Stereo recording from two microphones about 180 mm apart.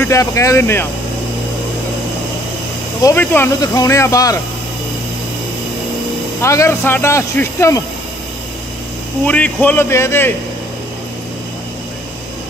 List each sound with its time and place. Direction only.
0.0 s speech: 15° left (ahead or behind)
3.0 s speech: 15° left (ahead or behind)
6.4 s speech: 15° left (ahead or behind)
9.2 s speech: 10° left (ahead or behind)